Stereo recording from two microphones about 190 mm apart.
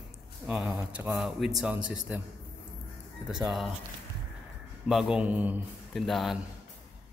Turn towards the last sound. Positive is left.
turn(degrees=0)  # may be behind; listen again after turning